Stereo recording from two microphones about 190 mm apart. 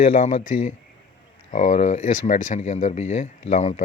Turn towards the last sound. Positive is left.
turn(degrees=35)  # may be behind; listen again after turning